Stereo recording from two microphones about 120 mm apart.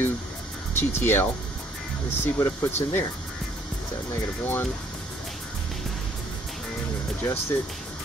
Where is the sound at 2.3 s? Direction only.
20° left (ahead or behind).